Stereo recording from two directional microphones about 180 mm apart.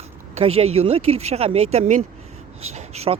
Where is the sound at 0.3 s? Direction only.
35° right (ahead or behind).